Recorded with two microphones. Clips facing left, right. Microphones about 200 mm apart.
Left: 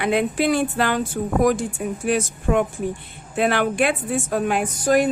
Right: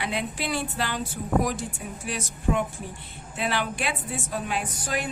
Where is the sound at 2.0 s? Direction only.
55° left (ahead or behind).